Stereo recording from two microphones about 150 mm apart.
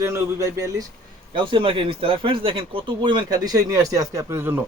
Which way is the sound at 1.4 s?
35° right (ahead or behind).